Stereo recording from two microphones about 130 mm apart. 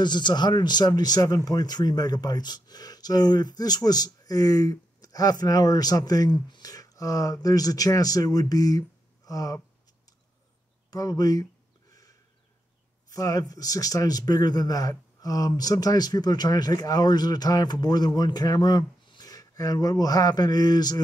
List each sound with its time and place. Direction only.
0.0 s speech: 35° left (ahead or behind)
10.9 s speech: 30° left (ahead or behind)
11.9 s a sound: 25° left (ahead or behind)
13.1 s speech: 25° left (ahead or behind)